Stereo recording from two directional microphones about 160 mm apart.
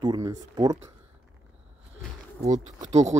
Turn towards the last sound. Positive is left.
turn(degrees=-45)  # may be behind; listen again after turning